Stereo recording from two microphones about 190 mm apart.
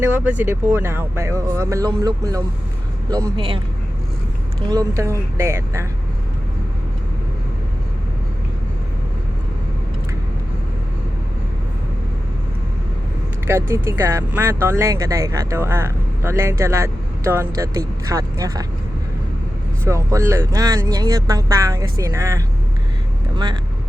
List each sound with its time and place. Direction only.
0.0 s speech: 10° right (ahead or behind); by 3.6 s 25° right (ahead or behind)
4.7 s speech: 15° right (ahead or behind)
13.5 s speech: 15° right (ahead or behind)
19.8 s speech: 15° right (ahead or behind)